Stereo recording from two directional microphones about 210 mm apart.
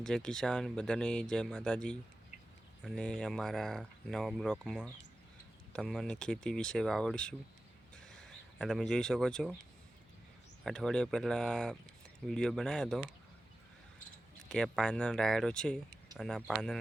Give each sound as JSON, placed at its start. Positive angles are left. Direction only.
{"t": 0.0, "sound": "speech", "side_deg": 5}
{"t": 7.9, "sound": "a sound", "side_deg": 5}
{"t": 10.6, "sound": "speech", "side_deg": 5}
{"t": 14.5, "sound": "speech", "side_deg": 5}